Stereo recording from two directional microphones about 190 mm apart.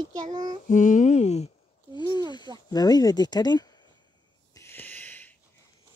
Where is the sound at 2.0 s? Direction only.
25° left (ahead or behind).